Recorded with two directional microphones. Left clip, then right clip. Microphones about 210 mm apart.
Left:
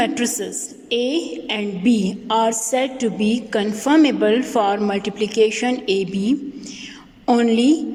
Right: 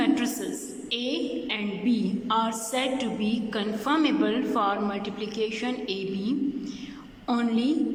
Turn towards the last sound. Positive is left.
turn(degrees=35)  # may be behind; listen again after turning